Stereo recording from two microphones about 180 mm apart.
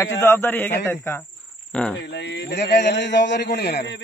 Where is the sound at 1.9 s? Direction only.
70° left (ahead or behind).